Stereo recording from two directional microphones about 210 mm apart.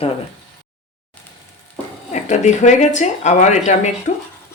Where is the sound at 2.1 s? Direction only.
35° left (ahead or behind).